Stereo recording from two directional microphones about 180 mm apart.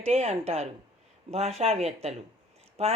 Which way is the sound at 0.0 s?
35° right (ahead or behind).